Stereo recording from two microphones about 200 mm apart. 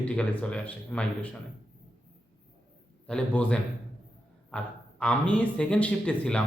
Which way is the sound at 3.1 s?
5° left (ahead or behind).